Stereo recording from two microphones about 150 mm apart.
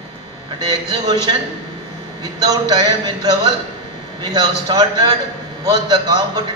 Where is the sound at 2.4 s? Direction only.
25° right (ahead or behind).